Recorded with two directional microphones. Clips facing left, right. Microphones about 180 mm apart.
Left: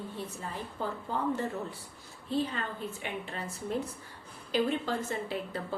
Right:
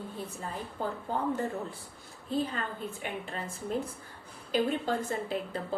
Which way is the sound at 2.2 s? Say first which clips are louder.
Even; 45° right (ahead or behind).